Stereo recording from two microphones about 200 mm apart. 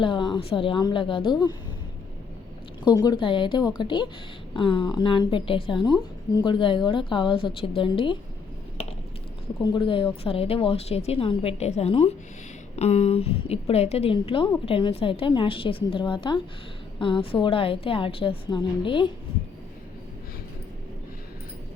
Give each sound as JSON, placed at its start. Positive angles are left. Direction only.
{"t": 0.0, "sound": "a woman's voice", "side_deg": 25}
{"t": 2.8, "sound": "a woman's voice", "side_deg": 20}
{"t": 9.7, "sound": "a woman's voice", "side_deg": 25}